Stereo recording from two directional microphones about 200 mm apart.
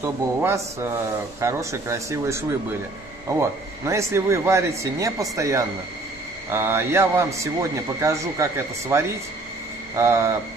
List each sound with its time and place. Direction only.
0.0 s a man's voice: 10° right (ahead or behind)